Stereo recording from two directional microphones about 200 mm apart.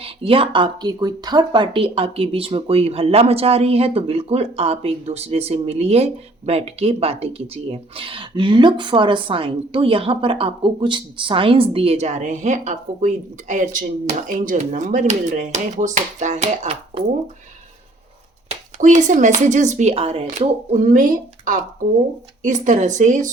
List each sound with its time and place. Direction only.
0.0 s speech: 25° right (ahead or behind)
18.4 s speech: 35° right (ahead or behind)